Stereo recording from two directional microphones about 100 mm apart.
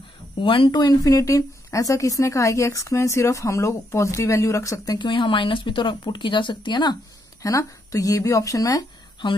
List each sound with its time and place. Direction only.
0.4 s speech: 60° left (ahead or behind)
0.7 s a woman's voice: 40° left (ahead or behind)
4.9 s speech: 50° left (ahead or behind)
7.4 s a woman's voice: 35° left (ahead or behind)
9.2 s speech: 50° left (ahead or behind)